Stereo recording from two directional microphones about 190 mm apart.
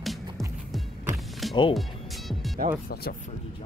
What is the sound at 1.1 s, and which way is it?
Music, centre (ahead or behind).